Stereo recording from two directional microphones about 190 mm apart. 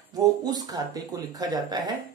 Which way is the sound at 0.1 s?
20° right (ahead or behind).